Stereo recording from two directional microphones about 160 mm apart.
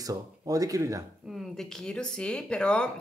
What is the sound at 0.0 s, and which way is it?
Speech, 20° right (ahead or behind).